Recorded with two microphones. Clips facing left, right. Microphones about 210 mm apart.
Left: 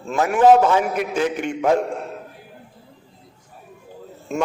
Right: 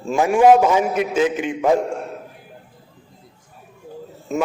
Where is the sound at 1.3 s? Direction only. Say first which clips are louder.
Right 1 dB; 5° right (ahead or behind).